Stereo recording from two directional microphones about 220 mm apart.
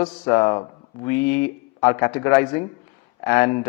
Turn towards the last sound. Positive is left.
turn(degrees=15)  # may be behind; listen again after turning